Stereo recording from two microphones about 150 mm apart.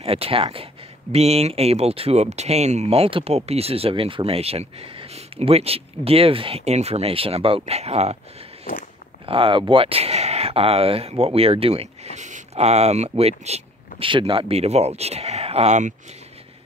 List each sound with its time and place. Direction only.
0.0 s speech: 40° right (ahead or behind)
9.2 s speech: 35° right (ahead or behind)